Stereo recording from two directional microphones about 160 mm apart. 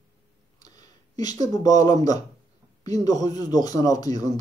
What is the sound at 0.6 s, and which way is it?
Speech, 25° left (ahead or behind).